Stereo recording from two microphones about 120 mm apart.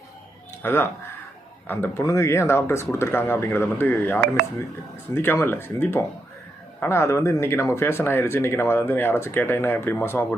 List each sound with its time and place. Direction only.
0.6 s speech: 20° left (ahead or behind)